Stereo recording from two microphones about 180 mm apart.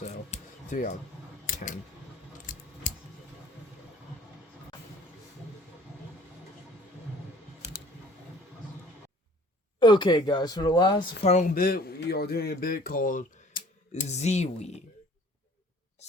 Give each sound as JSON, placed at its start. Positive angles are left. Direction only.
{"t": 0.0, "sound": "music", "side_deg": 40}
{"t": 1.5, "sound": "a sound", "side_deg": 45}
{"t": 2.5, "sound": "scissors", "side_deg": 45}
{"t": 2.8, "sound": "tick", "side_deg": 45}
{"t": 9.8, "sound": "speech", "side_deg": 25}
{"t": 11.2, "sound": "speech", "side_deg": 40}
{"t": 11.5, "sound": "speech", "side_deg": 60}
{"t": 13.9, "sound": "speech", "side_deg": 40}